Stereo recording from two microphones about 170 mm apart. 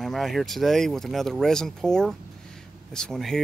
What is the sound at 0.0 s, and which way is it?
Speech, centre (ahead or behind).